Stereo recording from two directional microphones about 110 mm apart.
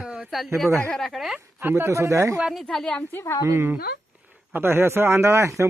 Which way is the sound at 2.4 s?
Centre (ahead or behind).